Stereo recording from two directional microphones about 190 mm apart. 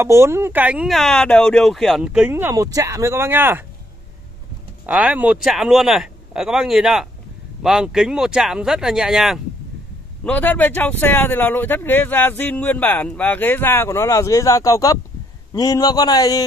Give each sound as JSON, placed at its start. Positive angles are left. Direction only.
{"t": 0.0, "sound": "speech", "side_deg": -15}
{"t": 4.8, "sound": "speech", "side_deg": -10}
{"t": 10.2, "sound": "a man's voice", "side_deg": 10}